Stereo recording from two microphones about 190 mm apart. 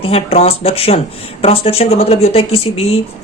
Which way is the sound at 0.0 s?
30° left (ahead or behind).